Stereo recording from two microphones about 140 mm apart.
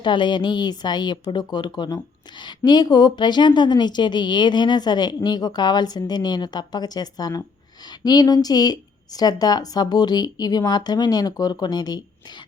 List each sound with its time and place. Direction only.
0.0 s a woman's voice: 35° left (ahead or behind)